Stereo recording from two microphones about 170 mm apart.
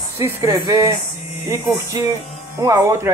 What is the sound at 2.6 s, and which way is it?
Speech, 20° right (ahead or behind).